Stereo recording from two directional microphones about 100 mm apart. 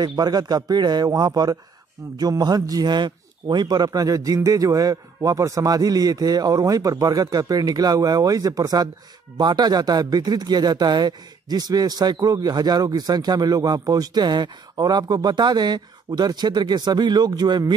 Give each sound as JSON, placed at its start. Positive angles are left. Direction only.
{"t": 0.0, "sound": "a man's voice", "side_deg": -40}